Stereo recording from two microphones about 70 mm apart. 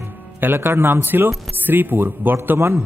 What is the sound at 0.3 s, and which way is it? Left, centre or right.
A man's voice, right.